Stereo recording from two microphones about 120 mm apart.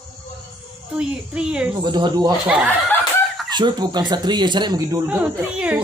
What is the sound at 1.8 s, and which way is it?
Speech, 40° right (ahead or behind).